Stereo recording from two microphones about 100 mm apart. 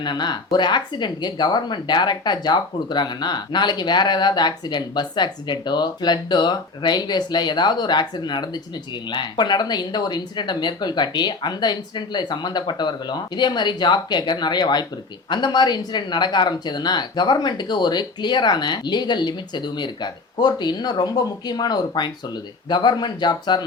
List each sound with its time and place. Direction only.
0.0 s speech: 45° left (ahead or behind)